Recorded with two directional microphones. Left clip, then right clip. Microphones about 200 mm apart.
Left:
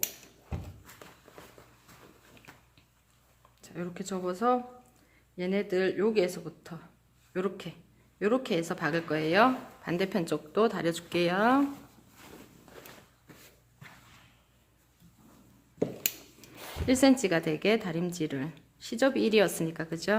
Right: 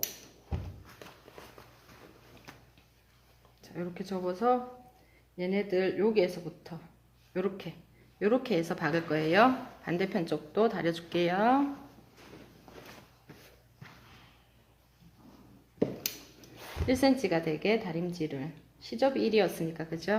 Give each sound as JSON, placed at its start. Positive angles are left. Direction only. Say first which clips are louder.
{"t": 3.6, "sound": "speech", "louder": "even", "side_deg": 20}
{"t": 16.0, "sound": "speech", "louder": "left 3 dB", "side_deg": 30}